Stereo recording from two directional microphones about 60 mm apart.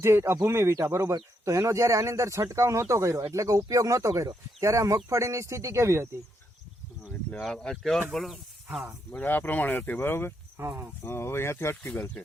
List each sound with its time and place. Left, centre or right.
0.0 s speech: right
1.1 s speech: right
7.3 s speech: centre
9.1 s speech: left
10.6 s speech: right
11.0 s speech: left
11.9 s speech: left